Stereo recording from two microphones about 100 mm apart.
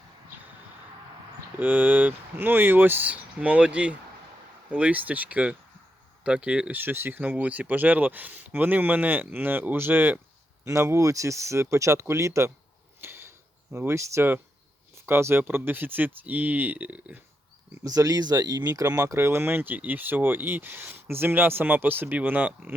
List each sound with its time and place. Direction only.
1.5 s speech: 20° right (ahead or behind)
13.0 s a sound: 20° right (ahead or behind)
13.7 s speech: 30° right (ahead or behind)
17.8 s speech: 35° right (ahead or behind); by 22.7 s 15° right (ahead or behind)